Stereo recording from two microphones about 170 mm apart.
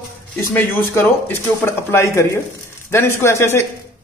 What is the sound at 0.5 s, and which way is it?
Speech, 15° left (ahead or behind).